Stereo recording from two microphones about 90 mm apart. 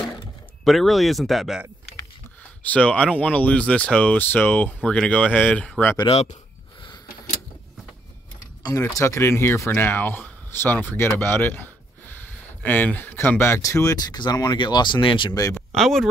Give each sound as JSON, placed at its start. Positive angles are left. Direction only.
{"t": 0.7, "sound": "speech", "side_deg": 0}
{"t": 2.6, "sound": "speech", "side_deg": 15}
{"t": 8.7, "sound": "speech", "side_deg": 35}
{"t": 14.0, "sound": "speech", "side_deg": 50}
{"t": 15.7, "sound": "speech", "side_deg": 5}